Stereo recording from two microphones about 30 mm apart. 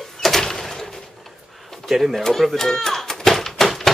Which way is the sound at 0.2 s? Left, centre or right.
Centre.